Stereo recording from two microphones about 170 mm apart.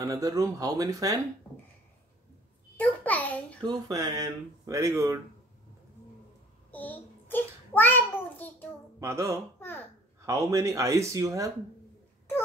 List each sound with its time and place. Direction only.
0.0 s speech: 20° right (ahead or behind)
2.8 s a sound: 10° left (ahead or behind)
3.6 s speech: 25° right (ahead or behind)
6.7 s a child's voice: 10° left (ahead or behind)
9.0 s speech: 15° right (ahead or behind)
9.6 s a child's voice: 10° left (ahead or behind)
10.2 s speech: 20° right (ahead or behind)